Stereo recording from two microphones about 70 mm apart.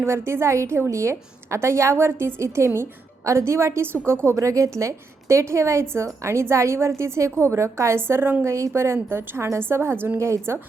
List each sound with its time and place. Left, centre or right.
0.0 s a woman's voice: right
8.5 s a woman's voice: right